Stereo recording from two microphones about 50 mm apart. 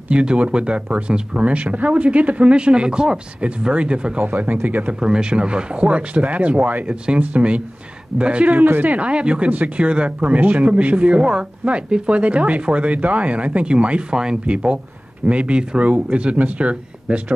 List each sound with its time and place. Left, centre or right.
0.1 s speech: right
4.2 s speech: right
5.0 s speech: centre
8.5 s speech: right
8.9 s speech: right